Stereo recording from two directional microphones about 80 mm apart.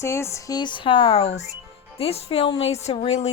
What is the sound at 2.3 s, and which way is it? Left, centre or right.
Speech, left.